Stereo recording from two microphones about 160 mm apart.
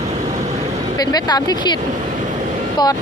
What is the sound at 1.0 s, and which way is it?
Speech, 25° left (ahead or behind).